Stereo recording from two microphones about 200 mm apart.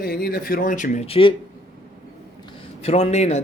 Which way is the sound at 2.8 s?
30° left (ahead or behind).